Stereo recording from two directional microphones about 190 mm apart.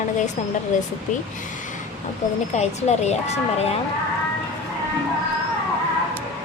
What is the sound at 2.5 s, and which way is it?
Speech, 35° left (ahead or behind).